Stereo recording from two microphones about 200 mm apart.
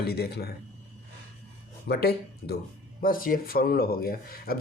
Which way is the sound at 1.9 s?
50° left (ahead or behind).